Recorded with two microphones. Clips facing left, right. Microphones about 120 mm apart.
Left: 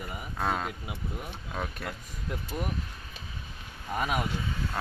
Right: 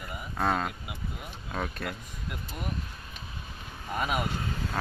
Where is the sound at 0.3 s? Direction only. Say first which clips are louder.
Right 2 dB; centre (ahead or behind).